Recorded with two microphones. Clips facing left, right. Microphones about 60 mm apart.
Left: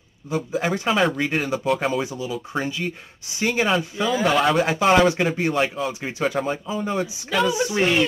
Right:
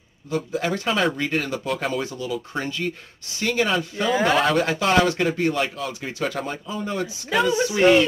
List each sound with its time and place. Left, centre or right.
0.3 s speech: centre